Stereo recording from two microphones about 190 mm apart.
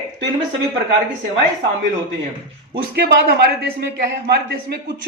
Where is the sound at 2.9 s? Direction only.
55° right (ahead or behind).